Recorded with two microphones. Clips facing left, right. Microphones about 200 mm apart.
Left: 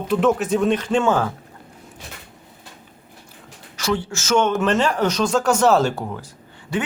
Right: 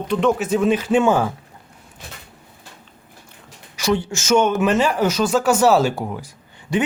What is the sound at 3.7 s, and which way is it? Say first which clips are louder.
A man's voice: right 3 dB; 15° right (ahead or behind).